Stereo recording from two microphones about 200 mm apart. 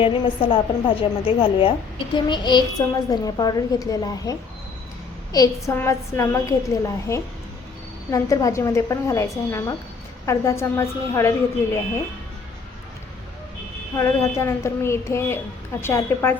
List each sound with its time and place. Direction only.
0.0 s a woman's voice: 25° left (ahead or behind)
13.9 s a woman's voice: 15° left (ahead or behind)